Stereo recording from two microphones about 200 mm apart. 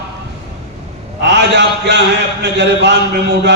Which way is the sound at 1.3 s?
60° right (ahead or behind).